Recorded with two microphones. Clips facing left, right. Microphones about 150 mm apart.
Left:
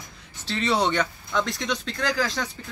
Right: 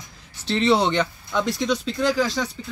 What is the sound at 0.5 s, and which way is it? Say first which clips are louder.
Speech: right 6 dB; 30° right (ahead or behind).